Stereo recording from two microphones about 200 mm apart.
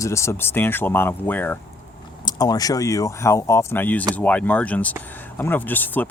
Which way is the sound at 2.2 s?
20° left (ahead or behind).